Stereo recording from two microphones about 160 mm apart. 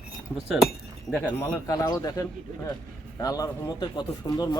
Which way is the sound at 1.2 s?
5° left (ahead or behind).